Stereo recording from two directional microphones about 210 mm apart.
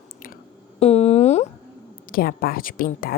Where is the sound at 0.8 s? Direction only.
30° left (ahead or behind).